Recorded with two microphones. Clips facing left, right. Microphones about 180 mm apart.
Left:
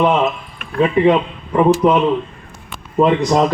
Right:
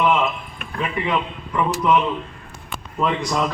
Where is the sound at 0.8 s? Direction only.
35° left (ahead or behind).